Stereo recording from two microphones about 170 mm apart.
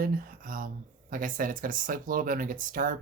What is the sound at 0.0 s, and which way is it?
Speech, 55° right (ahead or behind).